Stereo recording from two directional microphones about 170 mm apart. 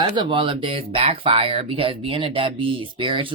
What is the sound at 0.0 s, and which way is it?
Speech, 30° right (ahead or behind).